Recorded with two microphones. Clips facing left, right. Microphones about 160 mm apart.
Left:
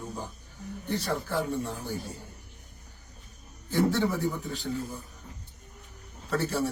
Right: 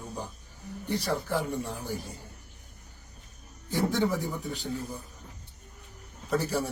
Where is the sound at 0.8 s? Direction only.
15° right (ahead or behind).